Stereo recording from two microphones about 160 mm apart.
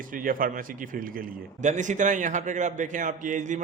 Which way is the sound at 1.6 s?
50° right (ahead or behind).